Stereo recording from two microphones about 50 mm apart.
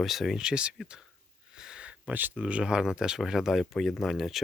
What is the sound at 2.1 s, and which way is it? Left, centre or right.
Speech, right.